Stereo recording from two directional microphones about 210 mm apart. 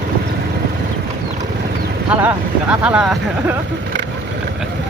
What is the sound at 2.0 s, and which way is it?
Speech, 5° right (ahead or behind).